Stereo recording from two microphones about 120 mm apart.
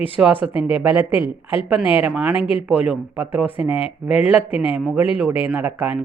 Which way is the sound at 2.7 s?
10° right (ahead or behind).